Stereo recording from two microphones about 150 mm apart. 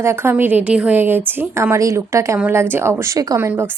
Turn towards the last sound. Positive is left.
turn(degrees=-15)  # may be behind; listen again after turning